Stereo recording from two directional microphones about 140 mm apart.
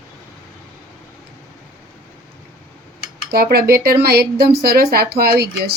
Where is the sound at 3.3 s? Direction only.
90° right.